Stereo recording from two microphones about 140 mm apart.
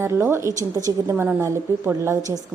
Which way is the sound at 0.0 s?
20° right (ahead or behind).